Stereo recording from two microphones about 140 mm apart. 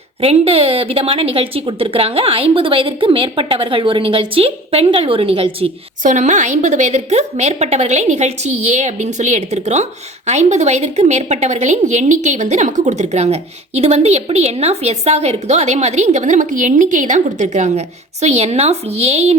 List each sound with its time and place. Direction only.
0.2 s a woman's voice: 45° right (ahead or behind)
6.0 s a woman's voice: 65° right (ahead or behind)